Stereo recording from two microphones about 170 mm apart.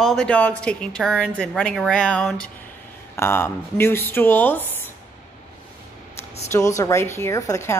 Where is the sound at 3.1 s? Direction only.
15° left (ahead or behind).